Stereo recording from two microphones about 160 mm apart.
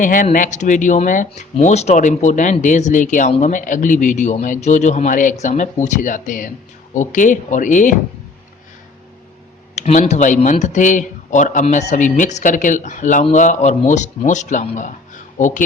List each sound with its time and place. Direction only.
0.0 s speech: 55° left (ahead or behind)
9.7 s speech: 45° left (ahead or behind)